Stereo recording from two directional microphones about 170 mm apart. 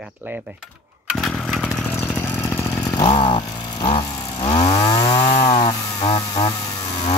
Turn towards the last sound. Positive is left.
turn(degrees=20)  # may be behind; listen again after turning